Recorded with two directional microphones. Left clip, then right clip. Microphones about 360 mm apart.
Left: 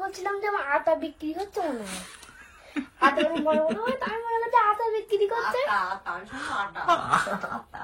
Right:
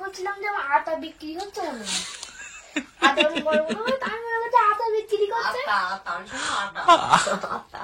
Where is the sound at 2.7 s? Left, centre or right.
Centre.